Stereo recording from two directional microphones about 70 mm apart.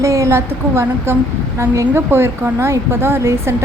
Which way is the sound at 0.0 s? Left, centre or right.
Right.